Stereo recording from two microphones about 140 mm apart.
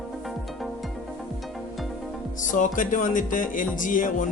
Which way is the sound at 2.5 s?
65° left (ahead or behind).